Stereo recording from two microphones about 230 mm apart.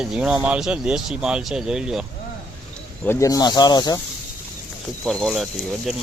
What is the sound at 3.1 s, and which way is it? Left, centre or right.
Speech, centre.